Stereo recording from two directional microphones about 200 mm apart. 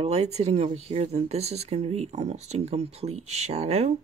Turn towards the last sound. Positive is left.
turn(degrees=-30)  # may be behind; listen again after turning